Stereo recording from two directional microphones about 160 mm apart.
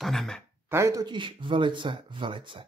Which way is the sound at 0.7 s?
15° right (ahead or behind).